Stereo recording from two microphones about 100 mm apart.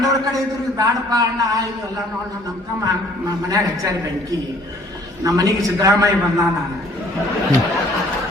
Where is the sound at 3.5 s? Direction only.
35° right (ahead or behind).